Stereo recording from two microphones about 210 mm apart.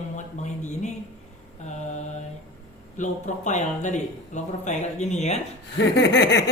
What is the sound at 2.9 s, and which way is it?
Speech, 35° left (ahead or behind).